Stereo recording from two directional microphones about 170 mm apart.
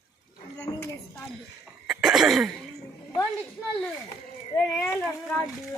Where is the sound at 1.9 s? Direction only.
Centre (ahead or behind).